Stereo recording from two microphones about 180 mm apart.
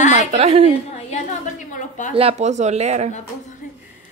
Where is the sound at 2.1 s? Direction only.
35° right (ahead or behind).